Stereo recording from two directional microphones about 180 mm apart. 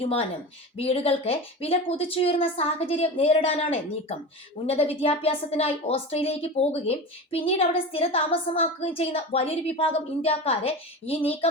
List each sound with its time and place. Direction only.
0.0 s a woman's voice: 30° left (ahead or behind)